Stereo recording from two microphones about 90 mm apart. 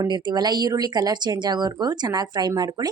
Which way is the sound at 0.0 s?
50° right (ahead or behind).